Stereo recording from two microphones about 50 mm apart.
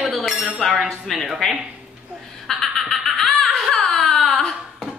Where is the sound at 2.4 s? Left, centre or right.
Centre.